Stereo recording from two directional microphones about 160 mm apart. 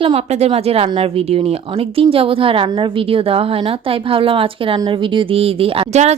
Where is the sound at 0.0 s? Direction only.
35° right (ahead or behind).